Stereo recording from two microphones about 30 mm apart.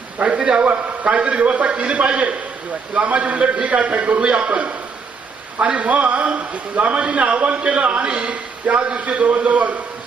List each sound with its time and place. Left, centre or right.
0.2 s a man's voice: right
6.9 s a man's voice: right
9.0 s a man's voice: right